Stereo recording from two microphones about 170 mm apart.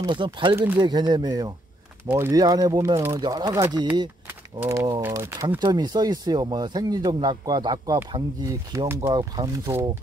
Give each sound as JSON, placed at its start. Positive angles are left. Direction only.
{"t": 0.0, "sound": "speech", "side_deg": -25}